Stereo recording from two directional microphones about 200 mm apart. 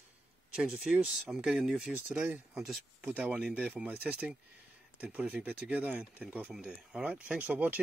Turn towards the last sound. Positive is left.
turn(degrees=-10)  # may be behind; listen again after turning